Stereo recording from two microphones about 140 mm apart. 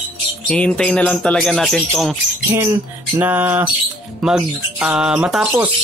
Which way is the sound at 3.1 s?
15° right (ahead or behind).